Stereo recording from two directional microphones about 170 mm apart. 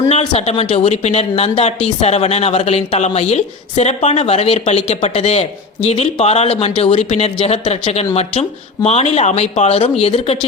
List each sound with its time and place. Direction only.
0.1 s a woman's voice: 40° left (ahead or behind)